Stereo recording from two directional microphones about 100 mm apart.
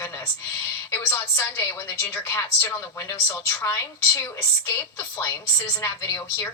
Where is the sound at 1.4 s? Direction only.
20° left (ahead or behind).